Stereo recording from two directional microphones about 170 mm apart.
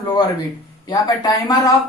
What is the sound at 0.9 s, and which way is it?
Speech, 25° left (ahead or behind).